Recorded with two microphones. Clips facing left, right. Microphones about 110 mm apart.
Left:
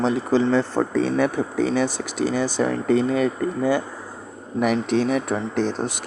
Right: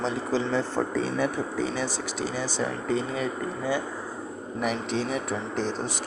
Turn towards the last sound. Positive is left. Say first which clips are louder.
# left 6 dB
turn(degrees=60)  # may be behind; listen again after turning